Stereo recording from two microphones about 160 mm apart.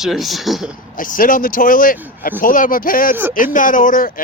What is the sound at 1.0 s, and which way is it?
Speech, 60° left (ahead or behind).